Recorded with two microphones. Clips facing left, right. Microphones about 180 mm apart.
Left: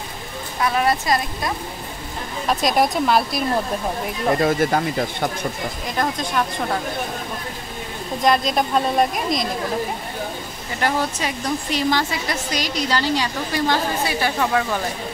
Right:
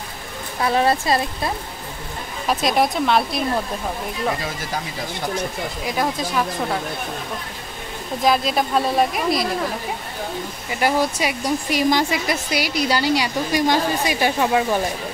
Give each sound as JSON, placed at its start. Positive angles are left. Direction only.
{"t": 0.6, "sound": "speech", "side_deg": -30}
{"t": 2.4, "sound": "speech", "side_deg": 0}
{"t": 4.4, "sound": "speech", "side_deg": 55}
{"t": 5.9, "sound": "speech", "side_deg": -5}
{"t": 8.2, "sound": "speech", "side_deg": -5}
{"t": 10.7, "sound": "speech", "side_deg": -10}